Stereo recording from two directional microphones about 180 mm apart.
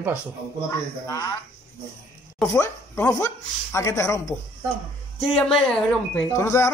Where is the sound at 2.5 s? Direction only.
15° left (ahead or behind).